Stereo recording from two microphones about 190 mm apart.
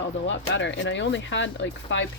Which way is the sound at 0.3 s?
75° left (ahead or behind).